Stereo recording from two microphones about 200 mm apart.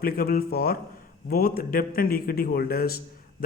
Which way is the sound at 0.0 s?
50° left (ahead or behind).